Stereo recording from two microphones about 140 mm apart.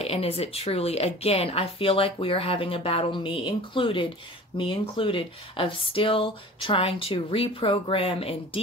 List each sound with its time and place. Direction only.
0.0 s a woman's voice: 45° left (ahead or behind)